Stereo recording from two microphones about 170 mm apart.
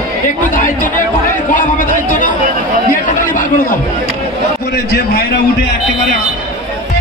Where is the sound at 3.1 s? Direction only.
50° left (ahead or behind).